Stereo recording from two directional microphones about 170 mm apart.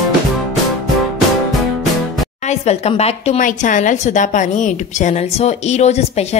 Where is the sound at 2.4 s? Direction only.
40° left (ahead or behind).